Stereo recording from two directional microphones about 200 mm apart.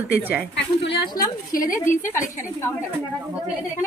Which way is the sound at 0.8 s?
25° left (ahead or behind).